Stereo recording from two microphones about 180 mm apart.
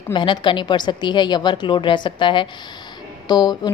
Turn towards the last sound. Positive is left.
turn(degrees=25)  # may be behind; listen again after turning